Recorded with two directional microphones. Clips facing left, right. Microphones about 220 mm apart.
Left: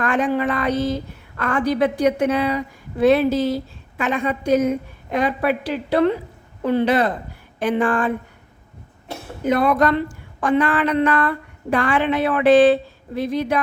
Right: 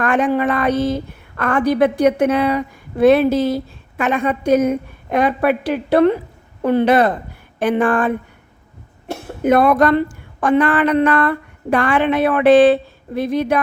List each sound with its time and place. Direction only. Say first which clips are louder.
0.0 s a woman's voice: right 3 dB; 60° right (ahead or behind)
9.4 s a woman's voice: right 4 dB; 55° right (ahead or behind)